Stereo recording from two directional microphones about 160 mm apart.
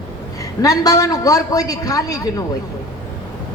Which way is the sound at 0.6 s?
20° left (ahead or behind).